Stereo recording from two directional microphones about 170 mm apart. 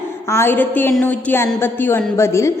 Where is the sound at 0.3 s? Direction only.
15° left (ahead or behind).